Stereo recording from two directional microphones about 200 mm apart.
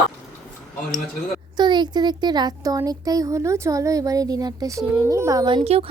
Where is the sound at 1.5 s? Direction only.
20° right (ahead or behind).